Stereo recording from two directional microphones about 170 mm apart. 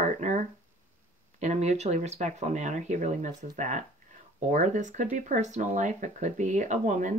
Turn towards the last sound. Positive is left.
turn(degrees=-45)  # may be behind; listen again after turning